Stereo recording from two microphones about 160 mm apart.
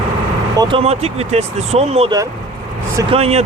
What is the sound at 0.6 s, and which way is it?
Speech, 35° right (ahead or behind).